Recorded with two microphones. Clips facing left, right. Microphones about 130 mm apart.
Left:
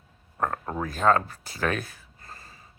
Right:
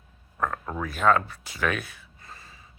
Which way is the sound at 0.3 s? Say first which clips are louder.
Left 1 dB; 35° left (ahead or behind).